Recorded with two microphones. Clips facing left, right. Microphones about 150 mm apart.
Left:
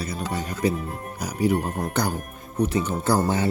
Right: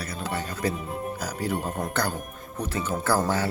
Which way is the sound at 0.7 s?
Centre (ahead or behind).